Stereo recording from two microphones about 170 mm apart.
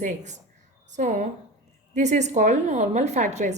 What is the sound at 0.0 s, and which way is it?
A woman's voice, 45° right (ahead or behind).